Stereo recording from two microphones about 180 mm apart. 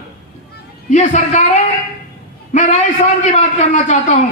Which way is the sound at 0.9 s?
40° left (ahead or behind).